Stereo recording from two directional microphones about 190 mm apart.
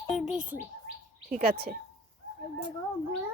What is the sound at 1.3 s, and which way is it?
Speech, 50° right (ahead or behind).